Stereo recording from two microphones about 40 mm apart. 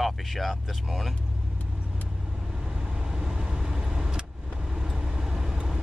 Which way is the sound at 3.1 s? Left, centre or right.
Centre.